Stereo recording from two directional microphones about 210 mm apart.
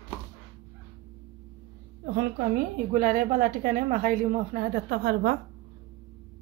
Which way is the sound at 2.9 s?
40° right (ahead or behind).